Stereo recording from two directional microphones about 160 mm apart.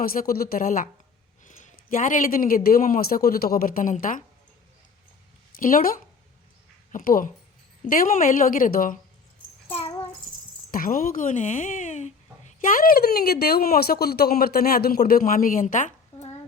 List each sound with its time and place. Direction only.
0.0 s speech: 65° left (ahead or behind)
5.5 s speech: 60° left (ahead or behind)
6.9 s speech: 60° left (ahead or behind)
10.7 s speech: 60° left (ahead or behind)